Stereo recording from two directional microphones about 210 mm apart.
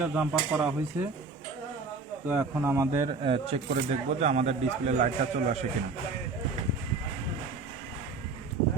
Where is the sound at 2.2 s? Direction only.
10° right (ahead or behind); by 5.0 s 35° right (ahead or behind).